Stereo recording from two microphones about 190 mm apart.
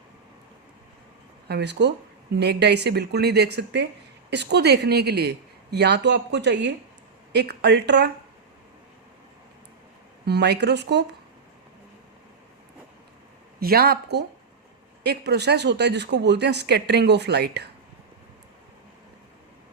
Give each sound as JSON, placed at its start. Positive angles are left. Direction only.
{"t": 1.5, "sound": "a woman's voice", "side_deg": -60}
{"t": 10.2, "sound": "a woman's voice", "side_deg": -60}
{"t": 13.6, "sound": "a woman's voice", "side_deg": -55}